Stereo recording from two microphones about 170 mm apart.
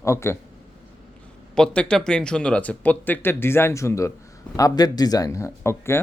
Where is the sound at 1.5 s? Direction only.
5° left (ahead or behind).